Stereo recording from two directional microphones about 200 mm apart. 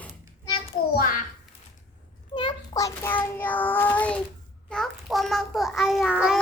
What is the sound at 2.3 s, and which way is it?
Child singing, 25° left (ahead or behind).